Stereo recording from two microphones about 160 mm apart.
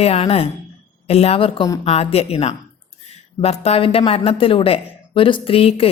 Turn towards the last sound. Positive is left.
turn(degrees=35)  # may be behind; listen again after turning